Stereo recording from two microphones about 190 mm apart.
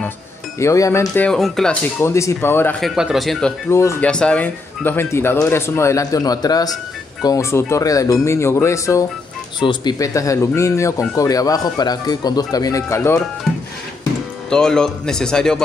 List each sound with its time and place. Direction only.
0.6 s speech: 15° left (ahead or behind)
2.8 s speech: centre (ahead or behind); by 13.2 s 15° left (ahead or behind)
13.5 s music: centre (ahead or behind)
14.5 s speech: 5° left (ahead or behind)